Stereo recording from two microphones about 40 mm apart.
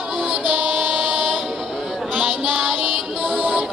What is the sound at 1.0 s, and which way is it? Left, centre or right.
Music, centre.